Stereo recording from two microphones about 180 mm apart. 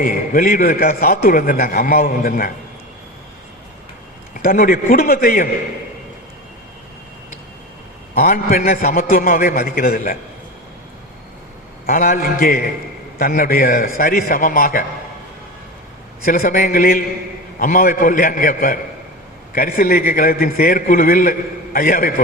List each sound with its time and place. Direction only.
0.0 s a man's voice: 50° left (ahead or behind)
4.4 s a man's voice: 50° left (ahead or behind)
8.1 s a man's voice: 50° left (ahead or behind)
11.9 s a man's voice: 50° left (ahead or behind)
16.2 s a man's voice: 55° left (ahead or behind)